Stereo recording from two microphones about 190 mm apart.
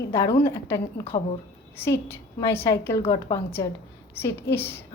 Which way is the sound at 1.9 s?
10° left (ahead or behind).